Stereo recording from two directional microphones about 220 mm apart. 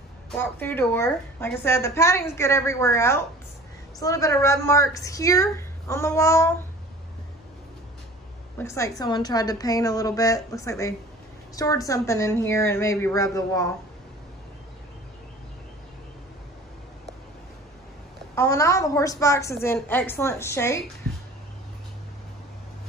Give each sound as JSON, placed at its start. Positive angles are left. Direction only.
{"t": 0.4, "sound": "a woman's voice", "side_deg": 10}
{"t": 8.5, "sound": "a woman's voice", "side_deg": 15}
{"t": 18.3, "sound": "a woman's voice", "side_deg": 15}